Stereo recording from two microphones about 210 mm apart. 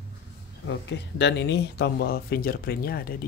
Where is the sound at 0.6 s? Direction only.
55° left (ahead or behind).